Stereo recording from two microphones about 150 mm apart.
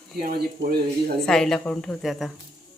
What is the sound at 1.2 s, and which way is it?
A woman's voice, 5° left (ahead or behind).